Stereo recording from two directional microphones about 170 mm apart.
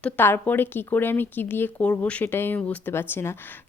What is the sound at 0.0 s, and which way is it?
A woman's voice, 10° left (ahead or behind).